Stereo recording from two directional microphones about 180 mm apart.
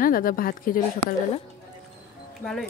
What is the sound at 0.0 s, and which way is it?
Speech, 50° left (ahead or behind).